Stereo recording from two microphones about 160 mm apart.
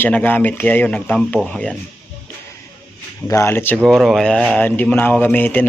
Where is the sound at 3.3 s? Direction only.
15° left (ahead or behind).